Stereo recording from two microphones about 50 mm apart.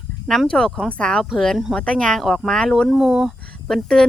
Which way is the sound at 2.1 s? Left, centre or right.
Centre.